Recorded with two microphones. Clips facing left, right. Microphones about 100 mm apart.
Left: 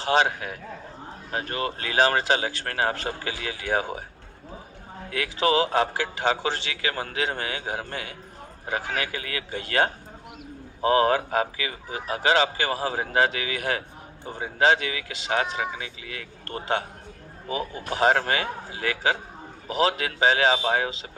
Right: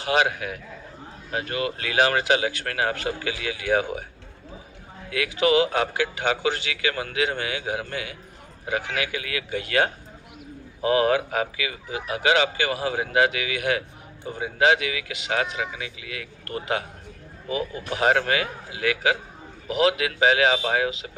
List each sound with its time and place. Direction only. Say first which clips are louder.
0.0 s speech: even; 30° left (ahead or behind)
5.1 s speech: right 2 dB; 30° left (ahead or behind)